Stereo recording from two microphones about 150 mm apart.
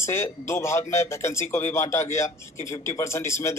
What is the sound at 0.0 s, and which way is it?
A man's voice, 20° left (ahead or behind).